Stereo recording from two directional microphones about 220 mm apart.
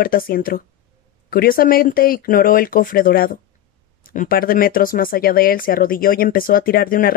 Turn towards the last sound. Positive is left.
turn(degrees=40)  # may be behind; listen again after turning